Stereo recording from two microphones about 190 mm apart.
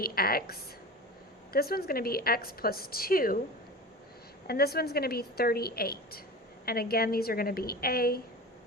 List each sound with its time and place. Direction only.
0.0 s a woman's voice: 50° left (ahead or behind)
1.5 s a woman's voice: 55° left (ahead or behind)
4.4 s a woman's voice: 55° left (ahead or behind)